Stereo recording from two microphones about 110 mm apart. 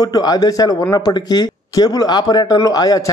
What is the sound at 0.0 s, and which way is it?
Speech, 35° left (ahead or behind).